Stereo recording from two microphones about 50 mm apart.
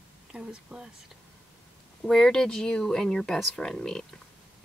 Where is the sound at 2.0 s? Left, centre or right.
Centre.